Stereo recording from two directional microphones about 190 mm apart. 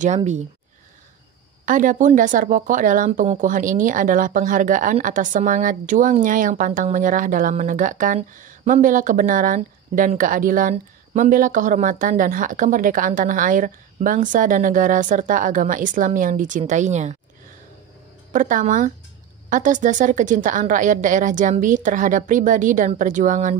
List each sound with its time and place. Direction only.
0.0 s speech: 40° right (ahead or behind)
1.7 s speech: 45° right (ahead or behind)
18.3 s speech: 40° right (ahead or behind)